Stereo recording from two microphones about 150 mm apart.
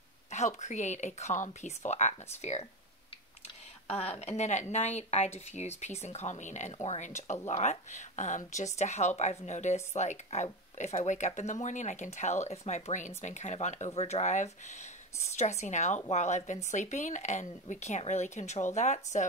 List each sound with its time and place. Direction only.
0.3 s speech: 50° left (ahead or behind)
3.9 s speech: 40° left (ahead or behind)